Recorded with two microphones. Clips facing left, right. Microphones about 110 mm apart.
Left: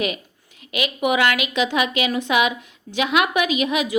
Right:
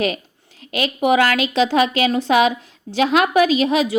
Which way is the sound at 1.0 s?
35° right (ahead or behind).